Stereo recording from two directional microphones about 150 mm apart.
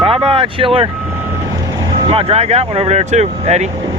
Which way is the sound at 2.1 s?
45° right (ahead or behind).